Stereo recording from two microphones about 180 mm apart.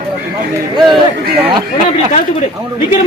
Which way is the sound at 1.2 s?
60° right (ahead or behind).